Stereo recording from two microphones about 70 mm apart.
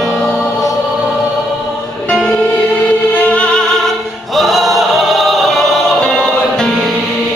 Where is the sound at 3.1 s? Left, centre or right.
Left.